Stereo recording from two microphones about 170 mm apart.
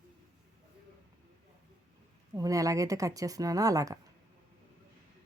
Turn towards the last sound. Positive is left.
turn(degrees=-20)  # may be behind; listen again after turning